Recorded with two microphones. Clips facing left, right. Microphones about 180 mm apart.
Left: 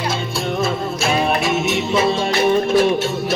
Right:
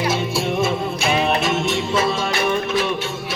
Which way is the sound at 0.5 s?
Centre (ahead or behind).